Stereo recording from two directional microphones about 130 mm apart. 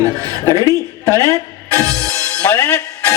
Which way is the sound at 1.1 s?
25° right (ahead or behind).